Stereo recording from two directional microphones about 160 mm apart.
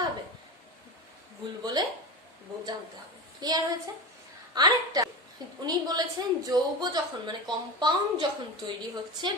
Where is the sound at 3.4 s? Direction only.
25° right (ahead or behind).